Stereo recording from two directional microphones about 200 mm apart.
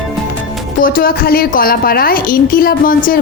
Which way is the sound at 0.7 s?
45° left (ahead or behind).